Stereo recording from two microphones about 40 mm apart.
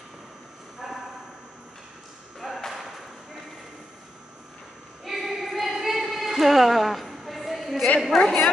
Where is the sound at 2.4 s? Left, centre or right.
Centre.